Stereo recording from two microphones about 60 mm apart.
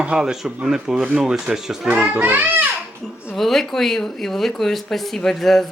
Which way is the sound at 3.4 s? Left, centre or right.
Centre.